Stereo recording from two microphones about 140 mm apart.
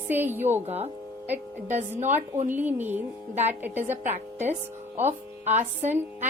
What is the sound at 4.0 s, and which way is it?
Speech, 55° right (ahead or behind).